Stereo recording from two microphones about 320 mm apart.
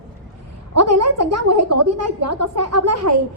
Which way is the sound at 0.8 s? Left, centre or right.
Right.